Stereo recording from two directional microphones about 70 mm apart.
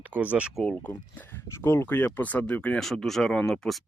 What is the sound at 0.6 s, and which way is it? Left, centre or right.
Speech, left.